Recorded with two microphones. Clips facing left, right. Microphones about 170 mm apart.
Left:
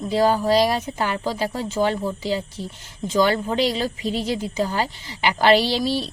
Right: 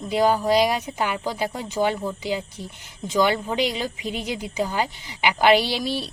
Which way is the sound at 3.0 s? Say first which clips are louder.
Left 2 dB; 10° right (ahead or behind).